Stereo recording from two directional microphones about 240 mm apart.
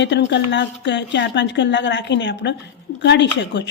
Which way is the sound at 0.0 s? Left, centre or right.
Left.